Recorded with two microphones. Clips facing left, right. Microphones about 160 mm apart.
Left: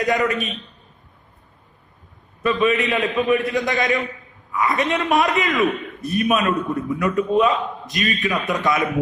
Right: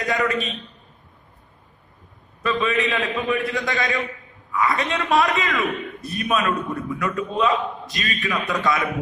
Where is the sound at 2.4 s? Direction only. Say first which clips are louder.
Left 3 dB; 20° left (ahead or behind).